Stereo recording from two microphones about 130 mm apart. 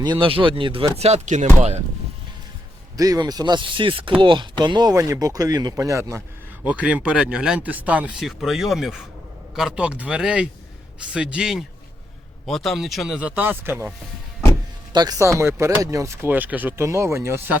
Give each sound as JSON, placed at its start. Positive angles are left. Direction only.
{"t": 0.0, "sound": "speech", "side_deg": -40}
{"t": 3.0, "sound": "speech", "side_deg": -30}
{"t": 6.7, "sound": "speech", "side_deg": -10}
{"t": 14.9, "sound": "speech", "side_deg": -30}